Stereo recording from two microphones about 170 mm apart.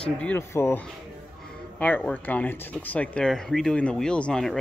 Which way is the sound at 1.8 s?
10° left (ahead or behind).